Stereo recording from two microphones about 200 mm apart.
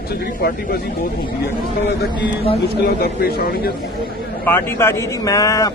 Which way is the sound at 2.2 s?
30° left (ahead or behind).